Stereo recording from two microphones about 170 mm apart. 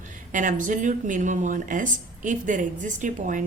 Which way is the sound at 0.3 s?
50° right (ahead or behind).